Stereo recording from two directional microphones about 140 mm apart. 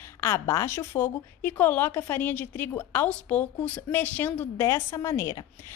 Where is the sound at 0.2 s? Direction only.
20° left (ahead or behind).